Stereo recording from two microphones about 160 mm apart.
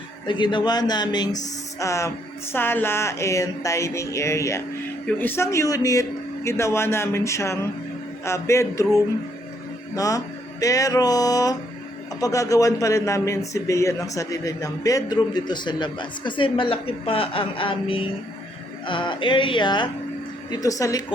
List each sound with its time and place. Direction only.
0.3 s a man's voice: 30° left (ahead or behind)
9.9 s a man's voice: 20° left (ahead or behind)